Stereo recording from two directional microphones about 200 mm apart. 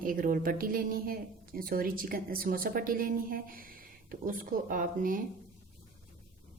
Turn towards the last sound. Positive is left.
turn(degrees=-45)  # may be behind; listen again after turning